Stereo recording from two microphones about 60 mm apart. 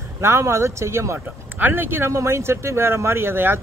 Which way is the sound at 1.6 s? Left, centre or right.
Right.